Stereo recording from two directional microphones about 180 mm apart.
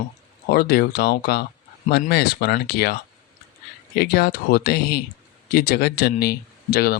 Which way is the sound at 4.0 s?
60° left (ahead or behind).